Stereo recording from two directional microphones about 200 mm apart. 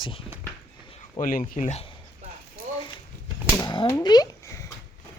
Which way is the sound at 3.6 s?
20° left (ahead or behind).